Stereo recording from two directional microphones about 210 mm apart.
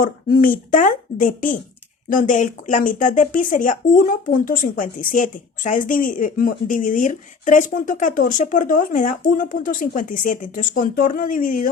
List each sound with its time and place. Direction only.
0.0 s speech: 40° left (ahead or behind)